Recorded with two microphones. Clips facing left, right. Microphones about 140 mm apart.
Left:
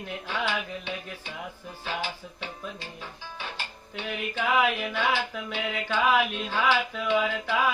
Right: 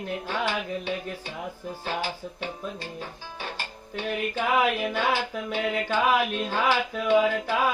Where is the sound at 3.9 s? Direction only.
40° right (ahead or behind).